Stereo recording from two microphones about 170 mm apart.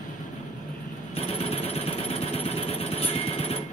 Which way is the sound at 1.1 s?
35° left (ahead or behind).